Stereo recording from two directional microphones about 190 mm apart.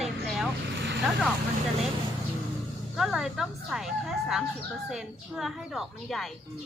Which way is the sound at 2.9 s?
Centre (ahead or behind).